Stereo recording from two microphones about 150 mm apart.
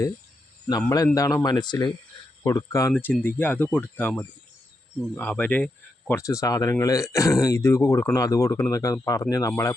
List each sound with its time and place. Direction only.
0.8 s speech: 20° left (ahead or behind)